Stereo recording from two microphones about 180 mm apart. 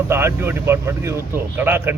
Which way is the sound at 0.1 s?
15° right (ahead or behind).